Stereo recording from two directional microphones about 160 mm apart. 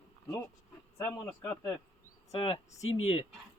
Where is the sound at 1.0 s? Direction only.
10° left (ahead or behind).